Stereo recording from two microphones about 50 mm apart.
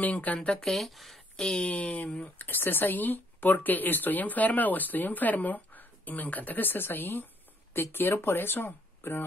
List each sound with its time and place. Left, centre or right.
0.0 s speech: left
0.5 s speech: centre
1.3 s speech: centre
2.3 s speech: left